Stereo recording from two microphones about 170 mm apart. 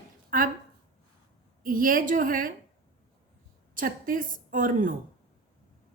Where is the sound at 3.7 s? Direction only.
55° right (ahead or behind).